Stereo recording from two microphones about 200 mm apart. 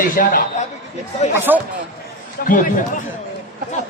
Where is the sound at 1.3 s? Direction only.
10° right (ahead or behind).